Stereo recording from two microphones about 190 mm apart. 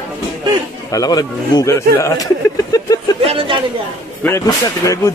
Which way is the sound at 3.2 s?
25° right (ahead or behind).